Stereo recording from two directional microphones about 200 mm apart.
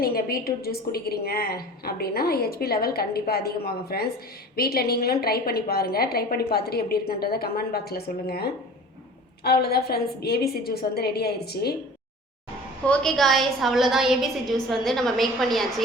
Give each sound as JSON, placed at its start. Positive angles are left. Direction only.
{"t": 0.0, "sound": "a woman's voice", "side_deg": 50}
{"t": 12.8, "sound": "a woman's voice", "side_deg": 5}